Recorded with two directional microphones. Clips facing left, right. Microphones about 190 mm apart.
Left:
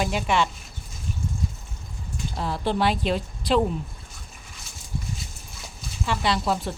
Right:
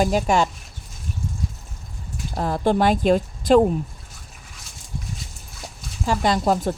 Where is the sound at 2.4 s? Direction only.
45° right (ahead or behind).